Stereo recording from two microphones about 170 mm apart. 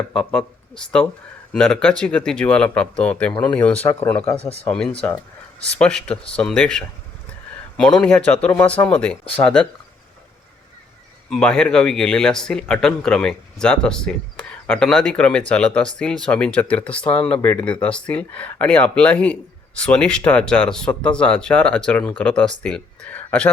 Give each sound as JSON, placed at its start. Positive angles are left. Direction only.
{"t": 0.1, "sound": "speech", "side_deg": 5}
{"t": 4.4, "sound": "speech", "side_deg": 35}
{"t": 4.6, "sound": "speech", "side_deg": 5}
{"t": 11.3, "sound": "speech", "side_deg": 5}